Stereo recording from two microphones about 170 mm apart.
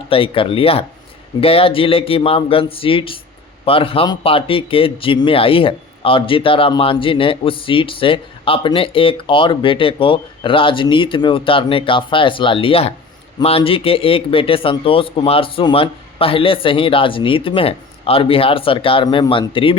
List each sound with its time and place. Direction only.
0.1 s speech: 30° left (ahead or behind)